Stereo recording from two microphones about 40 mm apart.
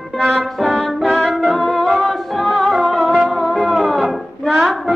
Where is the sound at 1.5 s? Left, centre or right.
Centre.